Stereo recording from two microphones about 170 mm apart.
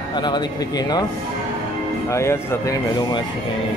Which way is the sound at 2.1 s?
15° left (ahead or behind).